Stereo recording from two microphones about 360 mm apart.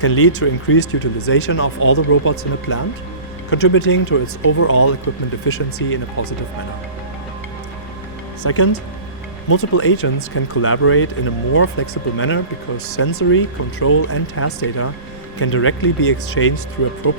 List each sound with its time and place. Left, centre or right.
0.0 s speech: left
8.4 s speech: left